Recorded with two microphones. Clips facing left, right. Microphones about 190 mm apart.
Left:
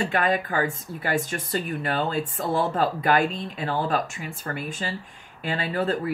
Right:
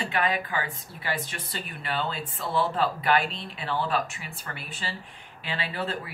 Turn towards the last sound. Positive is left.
turn(degrees=45)  # may be behind; listen again after turning